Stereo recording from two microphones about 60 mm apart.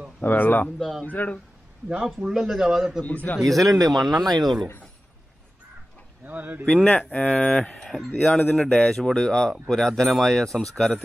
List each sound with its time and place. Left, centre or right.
0.2 s speech: left
0.7 s speech: centre
1.0 s speech: left
2.2 s a man's voice: centre
3.1 s speech: left
3.4 s speech: centre
6.2 s speech: right
6.6 s speech: centre
8.2 s speech: left
8.5 s speech: centre